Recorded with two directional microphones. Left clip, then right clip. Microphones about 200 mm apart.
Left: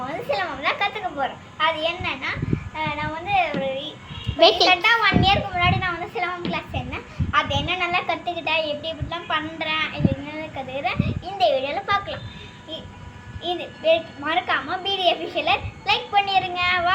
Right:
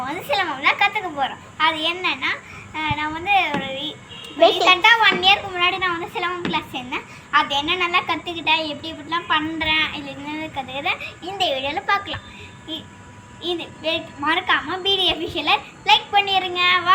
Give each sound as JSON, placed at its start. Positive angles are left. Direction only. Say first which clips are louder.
{"t": 0.3, "sound": "a sound", "louder": "right 5 dB", "side_deg": 15}
{"t": 2.7, "sound": "a child's voice", "louder": "right 4 dB", "side_deg": 15}
{"t": 13.4, "sound": "a child's voice", "louder": "left 1 dB", "side_deg": 15}